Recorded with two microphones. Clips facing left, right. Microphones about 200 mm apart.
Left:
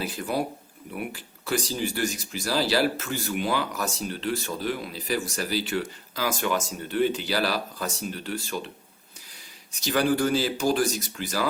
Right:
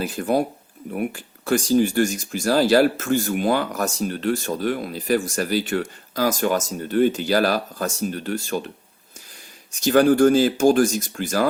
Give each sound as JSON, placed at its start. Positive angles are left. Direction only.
{"t": 0.0, "sound": "speech", "side_deg": -50}
{"t": 9.8, "sound": "speech", "side_deg": -50}